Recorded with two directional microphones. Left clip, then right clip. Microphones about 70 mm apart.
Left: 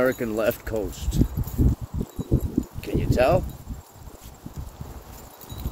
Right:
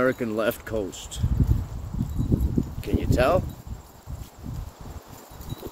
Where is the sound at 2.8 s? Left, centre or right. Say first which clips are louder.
Left 2 dB; centre.